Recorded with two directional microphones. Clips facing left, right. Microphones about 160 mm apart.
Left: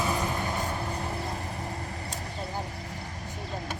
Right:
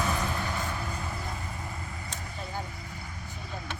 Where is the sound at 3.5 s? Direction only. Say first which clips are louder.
Left 3 dB; 40° left (ahead or behind).